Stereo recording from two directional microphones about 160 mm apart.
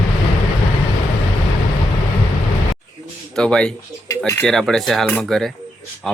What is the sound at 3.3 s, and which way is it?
Speech, 5° left (ahead or behind).